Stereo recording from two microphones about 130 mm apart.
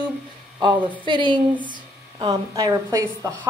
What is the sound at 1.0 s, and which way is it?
A woman's voice, 40° right (ahead or behind).